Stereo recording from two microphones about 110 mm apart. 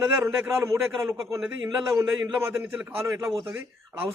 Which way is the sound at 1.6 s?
40° right (ahead or behind).